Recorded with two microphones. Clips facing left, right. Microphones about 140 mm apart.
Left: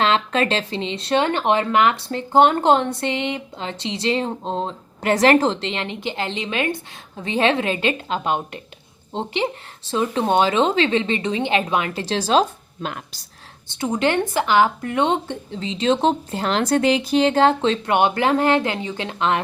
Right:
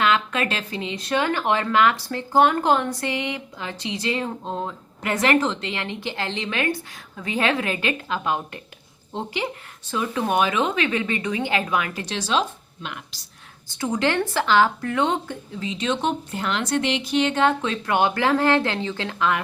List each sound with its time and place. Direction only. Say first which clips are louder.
0.0 s speech: left 3 dB; 30° left (ahead or behind)
5.1 s speech: left 5 dB; 35° left (ahead or behind)
13.7 s speech: left 2 dB; 25° left (ahead or behind)